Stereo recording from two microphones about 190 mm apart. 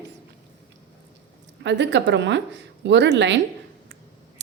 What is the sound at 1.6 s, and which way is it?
A woman's voice, 70° right (ahead or behind).